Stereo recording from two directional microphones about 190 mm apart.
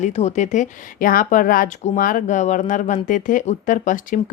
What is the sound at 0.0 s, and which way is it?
A woman's voice, 35° left (ahead or behind).